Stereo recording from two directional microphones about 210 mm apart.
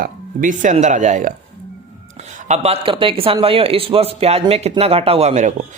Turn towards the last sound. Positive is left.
turn(degrees=-35)  # may be behind; listen again after turning